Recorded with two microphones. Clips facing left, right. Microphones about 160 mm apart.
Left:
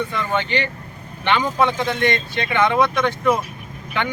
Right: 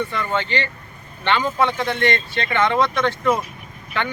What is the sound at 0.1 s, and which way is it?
Speech, 15° left (ahead or behind).